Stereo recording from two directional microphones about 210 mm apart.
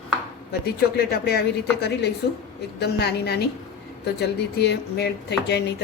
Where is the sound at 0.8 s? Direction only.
50° left (ahead or behind).